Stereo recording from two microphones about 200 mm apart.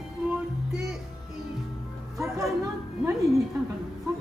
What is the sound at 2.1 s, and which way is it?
Music, 15° right (ahead or behind).